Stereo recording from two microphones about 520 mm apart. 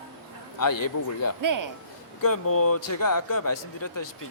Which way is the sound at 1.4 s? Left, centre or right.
Right.